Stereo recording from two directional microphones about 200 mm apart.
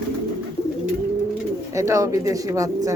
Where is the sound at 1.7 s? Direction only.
15° right (ahead or behind).